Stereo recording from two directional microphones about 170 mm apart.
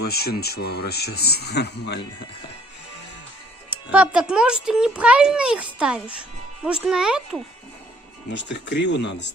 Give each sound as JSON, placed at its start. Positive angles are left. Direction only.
{"t": 0.0, "sound": "speech", "side_deg": 70}
{"t": 3.9, "sound": "a child's voice", "side_deg": -5}
{"t": 8.3, "sound": "speech", "side_deg": 90}